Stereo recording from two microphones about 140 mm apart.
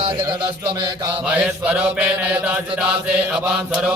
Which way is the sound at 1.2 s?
5° right (ahead or behind).